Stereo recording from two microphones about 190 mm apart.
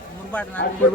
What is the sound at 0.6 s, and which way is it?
Speech, 60° left (ahead or behind).